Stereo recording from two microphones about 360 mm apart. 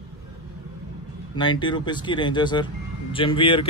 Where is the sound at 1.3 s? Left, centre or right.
Centre.